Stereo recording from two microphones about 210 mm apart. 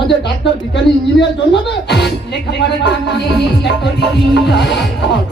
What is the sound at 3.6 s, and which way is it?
Music, 55° left (ahead or behind).